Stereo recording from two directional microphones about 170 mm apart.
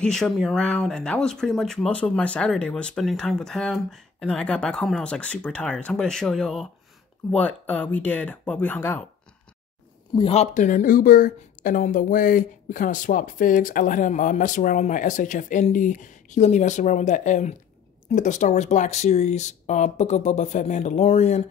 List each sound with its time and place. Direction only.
0.0 s speech: 5° left (ahead or behind)
10.1 s speech: 35° left (ahead or behind)